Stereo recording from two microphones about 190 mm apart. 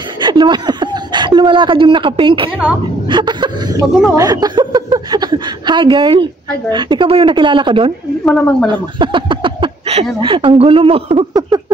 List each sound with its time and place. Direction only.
0.2 s a woman's voice: 25° right (ahead or behind)
8.3 s speech: 5° left (ahead or behind)
8.9 s a sound: 25° right (ahead or behind)
10.2 s speech: 25° right (ahead or behind)